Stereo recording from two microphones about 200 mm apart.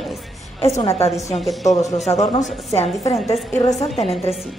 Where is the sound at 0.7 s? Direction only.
30° left (ahead or behind).